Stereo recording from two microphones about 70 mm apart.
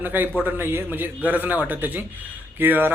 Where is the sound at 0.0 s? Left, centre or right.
Right.